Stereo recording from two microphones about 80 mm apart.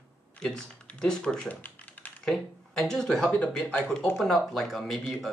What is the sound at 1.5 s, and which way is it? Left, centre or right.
Typing, left.